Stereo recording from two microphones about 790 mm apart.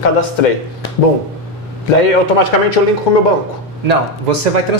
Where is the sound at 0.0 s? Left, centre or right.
Left.